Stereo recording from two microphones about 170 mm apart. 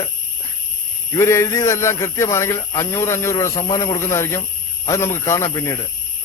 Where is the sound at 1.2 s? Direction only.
15° left (ahead or behind).